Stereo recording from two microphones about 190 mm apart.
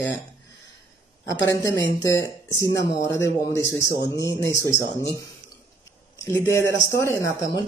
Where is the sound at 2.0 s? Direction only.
15° left (ahead or behind).